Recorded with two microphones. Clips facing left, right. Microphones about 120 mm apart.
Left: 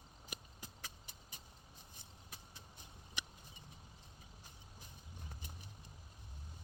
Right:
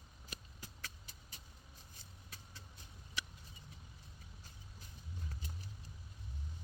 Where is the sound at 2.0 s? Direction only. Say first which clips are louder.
Even; 20° left (ahead or behind).